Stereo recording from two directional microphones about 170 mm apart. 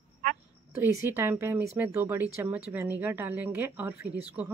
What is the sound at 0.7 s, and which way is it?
Speech, 15° right (ahead or behind).